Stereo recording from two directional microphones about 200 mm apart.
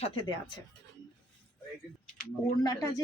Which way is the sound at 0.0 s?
25° left (ahead or behind).